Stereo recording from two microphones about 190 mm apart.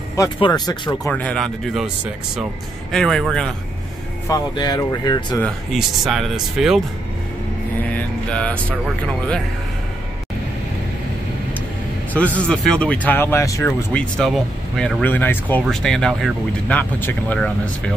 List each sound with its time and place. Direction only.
0.1 s speech: 20° left (ahead or behind)
1.1 s speech: 5° left (ahead or behind)
2.9 s speech: centre (ahead or behind)
4.3 s speech: 20° left (ahead or behind)
5.4 s speech: centre (ahead or behind)
7.9 s vehicle: 5° left (ahead or behind)
12.1 s speech: 10° left (ahead or behind)